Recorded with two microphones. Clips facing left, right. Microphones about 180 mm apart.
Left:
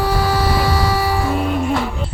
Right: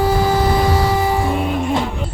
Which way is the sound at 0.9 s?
20° right (ahead or behind).